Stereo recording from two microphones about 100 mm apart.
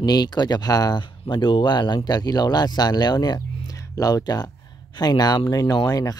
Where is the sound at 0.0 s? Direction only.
45° left (ahead or behind).